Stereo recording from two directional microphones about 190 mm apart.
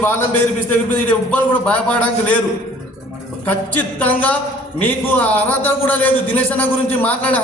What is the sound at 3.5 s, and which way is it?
A man's voice, 10° left (ahead or behind).